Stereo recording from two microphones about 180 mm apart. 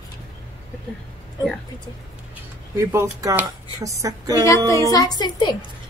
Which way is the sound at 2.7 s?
15° right (ahead or behind).